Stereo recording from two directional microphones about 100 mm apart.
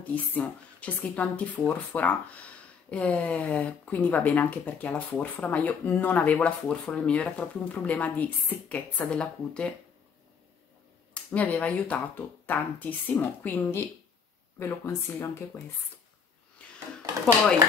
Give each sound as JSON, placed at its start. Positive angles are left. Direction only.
{"t": 0.0, "sound": "speech", "side_deg": 15}
{"t": 11.1, "sound": "speech", "side_deg": 15}
{"t": 16.6, "sound": "a sound", "side_deg": 10}